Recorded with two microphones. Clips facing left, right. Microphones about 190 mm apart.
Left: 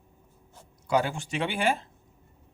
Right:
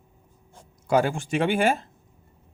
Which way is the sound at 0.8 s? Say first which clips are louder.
Right 4 dB; 50° right (ahead or behind).